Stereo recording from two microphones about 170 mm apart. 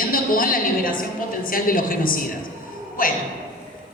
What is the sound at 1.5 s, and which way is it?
Speech, 55° left (ahead or behind).